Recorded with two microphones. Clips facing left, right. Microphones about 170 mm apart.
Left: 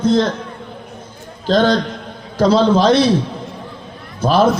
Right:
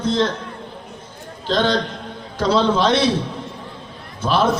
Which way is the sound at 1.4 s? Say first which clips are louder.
Left 5 dB; 45° left (ahead or behind).